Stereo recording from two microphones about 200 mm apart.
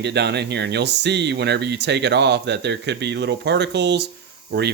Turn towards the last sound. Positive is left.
turn(degrees=-55)  # may be behind; listen again after turning